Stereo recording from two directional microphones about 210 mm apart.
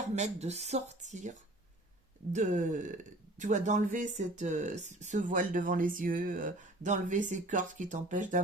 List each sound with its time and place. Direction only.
0.0 s speech: 35° right (ahead or behind)